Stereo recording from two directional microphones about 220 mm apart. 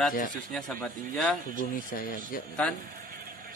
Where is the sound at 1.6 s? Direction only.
40° left (ahead or behind).